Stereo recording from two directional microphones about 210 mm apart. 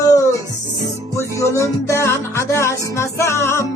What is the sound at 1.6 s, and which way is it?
Music, 15° left (ahead or behind).